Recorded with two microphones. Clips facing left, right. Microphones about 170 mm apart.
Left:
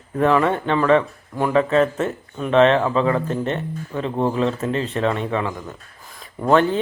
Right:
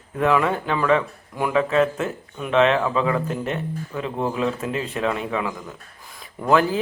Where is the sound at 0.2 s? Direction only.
5° right (ahead or behind).